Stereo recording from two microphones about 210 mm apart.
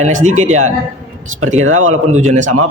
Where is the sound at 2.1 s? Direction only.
35° right (ahead or behind).